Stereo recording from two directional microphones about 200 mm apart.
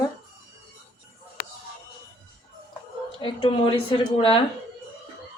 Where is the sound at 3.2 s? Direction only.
25° left (ahead or behind).